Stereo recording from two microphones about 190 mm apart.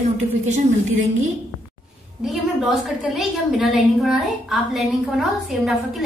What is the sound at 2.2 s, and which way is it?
A woman's voice, centre (ahead or behind).